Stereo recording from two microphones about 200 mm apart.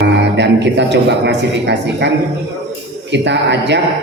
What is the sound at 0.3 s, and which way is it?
A man's voice, 60° right (ahead or behind).